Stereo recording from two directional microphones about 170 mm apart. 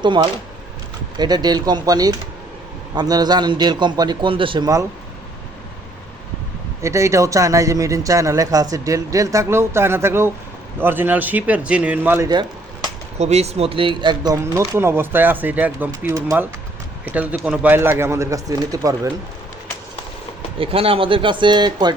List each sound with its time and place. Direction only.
0.0 s a man's voice: 25° right (ahead or behind)
6.8 s a man's voice: 15° right (ahead or behind)
12.3 s a sound: 25° right (ahead or behind)
13.1 s speech: 40° right (ahead or behind); by 19.1 s 20° right (ahead or behind)
20.6 s speech: 35° right (ahead or behind)